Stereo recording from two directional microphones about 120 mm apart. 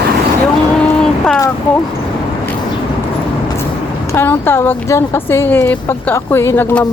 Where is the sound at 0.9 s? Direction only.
5° left (ahead or behind).